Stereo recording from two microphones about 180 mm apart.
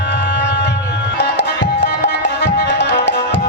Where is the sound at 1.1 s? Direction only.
70° left (ahead or behind).